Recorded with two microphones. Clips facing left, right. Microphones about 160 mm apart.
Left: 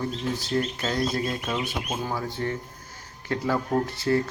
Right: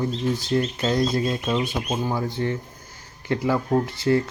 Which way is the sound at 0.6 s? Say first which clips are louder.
Right 3 dB; 25° right (ahead or behind).